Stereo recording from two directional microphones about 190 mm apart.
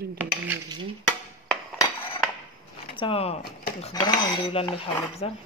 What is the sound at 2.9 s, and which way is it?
Dishes, 30° left (ahead or behind).